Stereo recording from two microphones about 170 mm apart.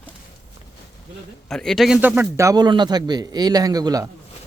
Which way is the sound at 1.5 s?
5° left (ahead or behind).